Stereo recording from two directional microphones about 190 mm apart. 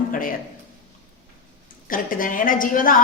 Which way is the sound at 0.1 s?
45° left (ahead or behind).